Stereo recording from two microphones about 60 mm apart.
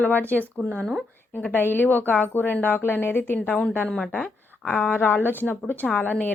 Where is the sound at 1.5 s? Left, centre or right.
Left.